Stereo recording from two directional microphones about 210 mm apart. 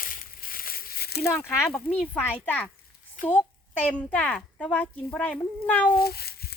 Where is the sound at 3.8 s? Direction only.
5° left (ahead or behind).